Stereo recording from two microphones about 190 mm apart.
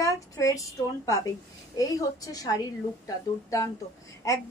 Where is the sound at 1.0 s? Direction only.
15° left (ahead or behind).